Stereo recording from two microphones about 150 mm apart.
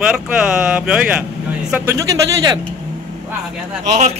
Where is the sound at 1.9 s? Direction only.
20° right (ahead or behind).